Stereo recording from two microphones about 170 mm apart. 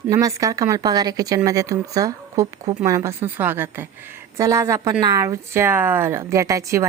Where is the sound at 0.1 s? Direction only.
20° right (ahead or behind).